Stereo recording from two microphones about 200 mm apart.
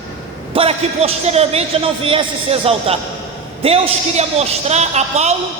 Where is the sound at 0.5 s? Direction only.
30° right (ahead or behind).